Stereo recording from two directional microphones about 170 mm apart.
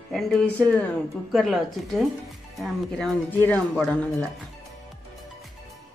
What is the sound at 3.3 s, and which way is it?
Speech, 10° left (ahead or behind).